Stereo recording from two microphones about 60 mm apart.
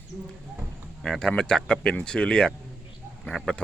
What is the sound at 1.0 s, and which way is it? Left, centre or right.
Speech, centre.